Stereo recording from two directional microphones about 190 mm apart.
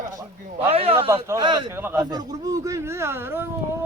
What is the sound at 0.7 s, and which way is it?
Speech, 30° right (ahead or behind).